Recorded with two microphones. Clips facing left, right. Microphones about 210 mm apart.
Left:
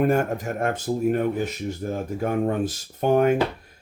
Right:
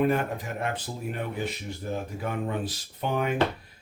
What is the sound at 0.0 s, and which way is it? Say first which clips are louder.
Speech: left 4 dB; 45° left (ahead or behind).